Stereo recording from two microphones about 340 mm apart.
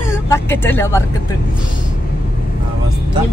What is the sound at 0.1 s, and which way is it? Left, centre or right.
Speech, centre.